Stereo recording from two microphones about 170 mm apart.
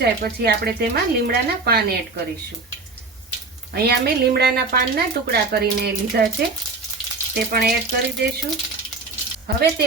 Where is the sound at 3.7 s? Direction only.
70° right (ahead or behind).